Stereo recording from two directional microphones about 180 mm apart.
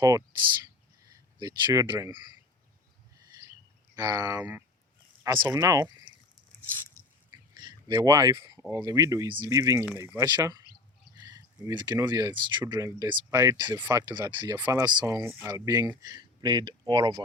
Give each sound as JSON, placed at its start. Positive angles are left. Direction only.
{"t": 1.4, "sound": "speech", "side_deg": -20}
{"t": 3.9, "sound": "speech", "side_deg": -20}
{"t": 5.2, "sound": "speech", "side_deg": -20}
{"t": 7.5, "sound": "speech", "side_deg": -25}